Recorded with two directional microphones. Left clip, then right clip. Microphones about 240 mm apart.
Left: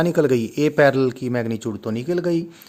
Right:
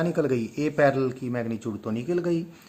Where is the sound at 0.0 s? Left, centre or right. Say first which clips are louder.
Left 7 dB; left.